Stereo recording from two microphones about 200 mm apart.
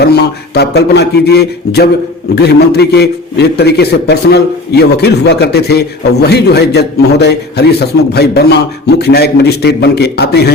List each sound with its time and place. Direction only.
0.0 s a man's voice: 55° left (ahead or behind)